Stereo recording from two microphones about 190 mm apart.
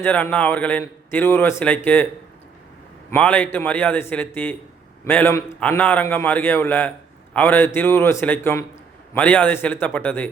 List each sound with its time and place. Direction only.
0.0 s a man's voice: 10° left (ahead or behind)
3.1 s a man's voice: 10° left (ahead or behind)